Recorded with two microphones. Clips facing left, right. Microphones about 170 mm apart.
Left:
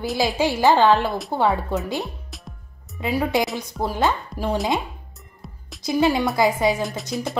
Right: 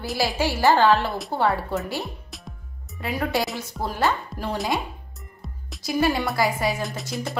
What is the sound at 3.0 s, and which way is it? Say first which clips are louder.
Speech: left 4 dB; 15° left (ahead or behind).